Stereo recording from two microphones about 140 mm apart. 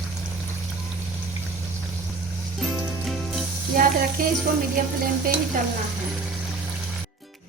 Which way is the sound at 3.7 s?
90° right.